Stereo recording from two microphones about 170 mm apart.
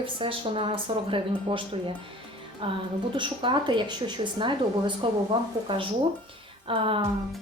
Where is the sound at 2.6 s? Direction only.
35° right (ahead or behind).